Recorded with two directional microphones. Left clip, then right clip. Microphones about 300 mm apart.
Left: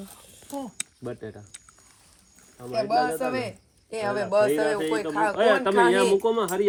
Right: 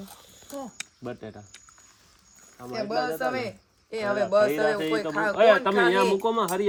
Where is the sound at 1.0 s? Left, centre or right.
Right.